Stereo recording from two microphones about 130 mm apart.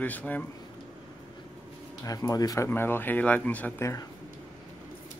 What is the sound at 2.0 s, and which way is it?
Speech, 30° left (ahead or behind).